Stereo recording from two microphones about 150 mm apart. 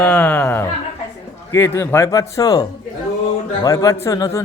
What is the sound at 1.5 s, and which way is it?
Speech, 15° left (ahead or behind).